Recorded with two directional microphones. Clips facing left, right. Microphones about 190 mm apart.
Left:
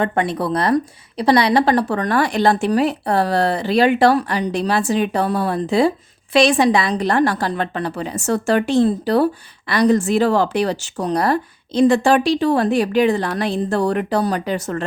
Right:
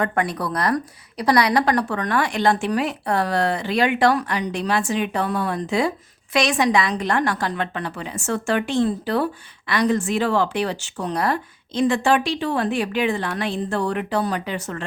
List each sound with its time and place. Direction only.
0.0 s a woman's voice: 25° left (ahead or behind)